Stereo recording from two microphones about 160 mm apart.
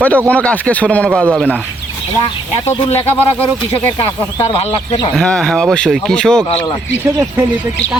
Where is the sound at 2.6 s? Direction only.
40° left (ahead or behind).